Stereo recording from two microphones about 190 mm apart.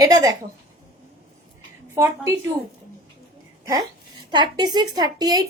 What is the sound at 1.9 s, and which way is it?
Speech, 15° right (ahead or behind).